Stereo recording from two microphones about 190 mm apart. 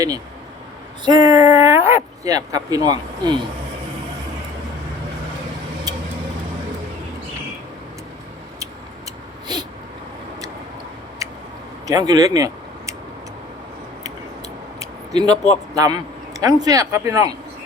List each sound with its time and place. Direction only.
1.0 s speech: 20° right (ahead or behind)
5.9 s vehicle: 20° right (ahead or behind)
9.5 s a sound: 20° right (ahead or behind)
11.9 s speech: 20° right (ahead or behind)
14.8 s a sound: 20° right (ahead or behind)
15.7 s speech: 20° right (ahead or behind)